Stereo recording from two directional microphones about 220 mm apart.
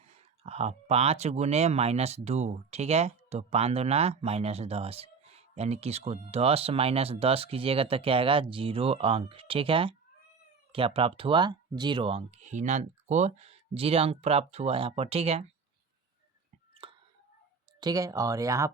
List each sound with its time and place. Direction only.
0.1 s speech: 30° right (ahead or behind)
16.8 s whispering: 25° right (ahead or behind)
17.7 s speech: 15° right (ahead or behind)